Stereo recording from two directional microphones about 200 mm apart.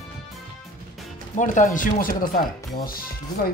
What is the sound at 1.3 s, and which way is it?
Speech, 40° left (ahead or behind).